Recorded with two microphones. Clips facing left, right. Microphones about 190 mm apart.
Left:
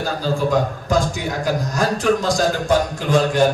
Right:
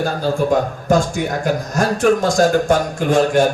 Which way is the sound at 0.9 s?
55° right (ahead or behind).